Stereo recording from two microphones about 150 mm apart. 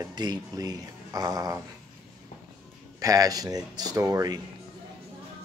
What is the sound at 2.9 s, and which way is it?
Speech, 25° right (ahead or behind).